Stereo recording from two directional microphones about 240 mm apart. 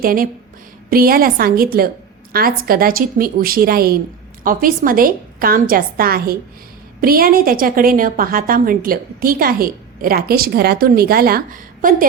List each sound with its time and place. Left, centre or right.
0.0 s a woman's voice: right